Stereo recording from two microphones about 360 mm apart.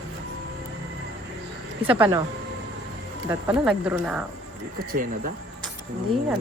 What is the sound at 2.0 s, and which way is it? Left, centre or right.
Speech, centre.